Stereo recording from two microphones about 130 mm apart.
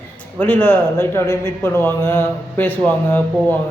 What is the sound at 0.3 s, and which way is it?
A man's voice, 15° left (ahead or behind).